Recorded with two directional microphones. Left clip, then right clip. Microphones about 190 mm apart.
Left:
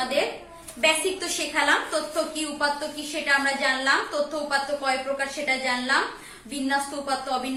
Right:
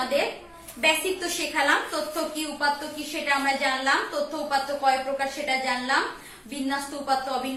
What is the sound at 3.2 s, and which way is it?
A woman's voice, 30° left (ahead or behind).